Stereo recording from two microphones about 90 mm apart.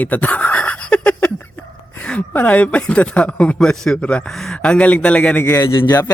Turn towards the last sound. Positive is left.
turn(degrees=40)  # may be behind; listen again after turning